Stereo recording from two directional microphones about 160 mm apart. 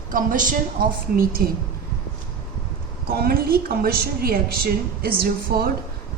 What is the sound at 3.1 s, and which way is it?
A woman's voice, 75° right (ahead or behind).